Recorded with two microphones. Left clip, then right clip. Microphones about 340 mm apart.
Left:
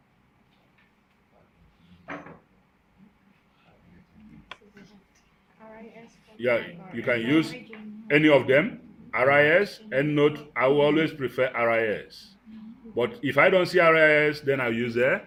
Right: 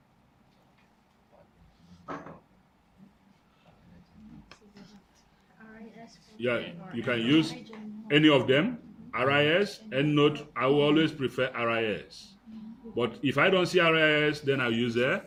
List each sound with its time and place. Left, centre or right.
6.4 s speech: centre